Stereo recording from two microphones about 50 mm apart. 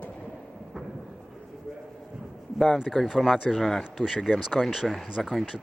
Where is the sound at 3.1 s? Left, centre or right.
Centre.